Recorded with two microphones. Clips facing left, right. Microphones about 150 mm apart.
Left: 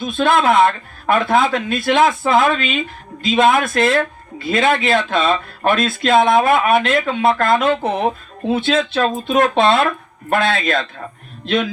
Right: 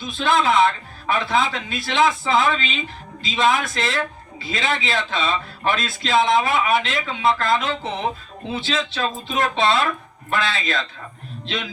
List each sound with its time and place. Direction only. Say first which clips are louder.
0.0 s a man's voice: left 5 dB; 55° left (ahead or behind)